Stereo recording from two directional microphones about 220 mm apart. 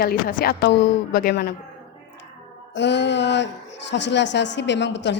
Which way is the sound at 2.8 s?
55° left (ahead or behind).